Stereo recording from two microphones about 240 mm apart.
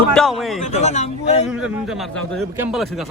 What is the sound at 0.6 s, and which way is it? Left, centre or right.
Speech, left.